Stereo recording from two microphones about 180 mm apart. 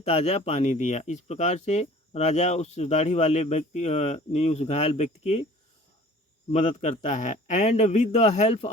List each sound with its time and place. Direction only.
0.0 s speech: 35° left (ahead or behind)
6.5 s speech: 35° left (ahead or behind)